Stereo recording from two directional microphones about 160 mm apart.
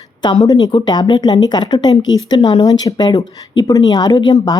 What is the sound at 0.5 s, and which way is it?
Speech, 30° left (ahead or behind).